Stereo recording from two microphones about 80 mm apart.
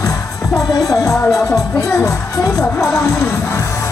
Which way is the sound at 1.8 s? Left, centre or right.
Left.